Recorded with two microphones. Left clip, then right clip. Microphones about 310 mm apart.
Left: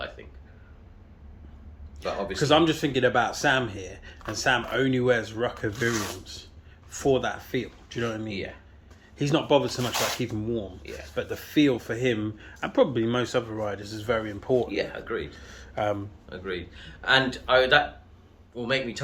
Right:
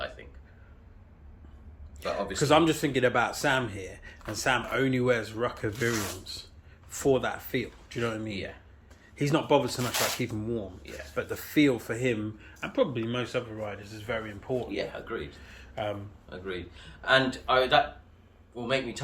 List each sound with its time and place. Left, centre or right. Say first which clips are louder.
2.0 s speech: left 2 dB; centre
12.4 s speech: left 7 dB; centre
14.7 s speech: left 4 dB; centre